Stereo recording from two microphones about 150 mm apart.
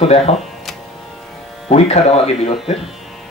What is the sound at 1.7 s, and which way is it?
Speech, 45° left (ahead or behind).